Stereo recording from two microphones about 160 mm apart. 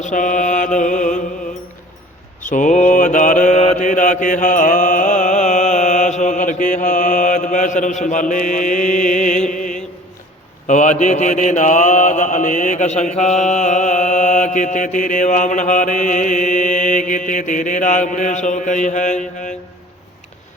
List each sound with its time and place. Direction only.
0.0 s mantra: 50° left (ahead or behind)
2.4 s mantra: 50° left (ahead or behind)